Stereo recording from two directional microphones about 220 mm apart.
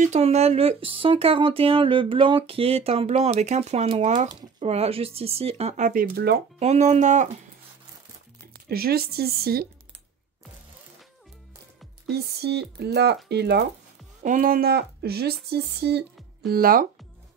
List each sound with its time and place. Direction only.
0.0 s speech: 30° right (ahead or behind)
6.6 s speech: 30° right (ahead or behind)
8.6 s speech: 45° right (ahead or behind)
12.1 s speech: 45° right (ahead or behind)